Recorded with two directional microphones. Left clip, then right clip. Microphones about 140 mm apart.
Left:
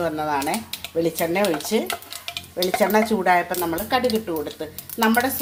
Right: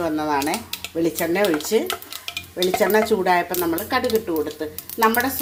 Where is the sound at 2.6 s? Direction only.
10° right (ahead or behind).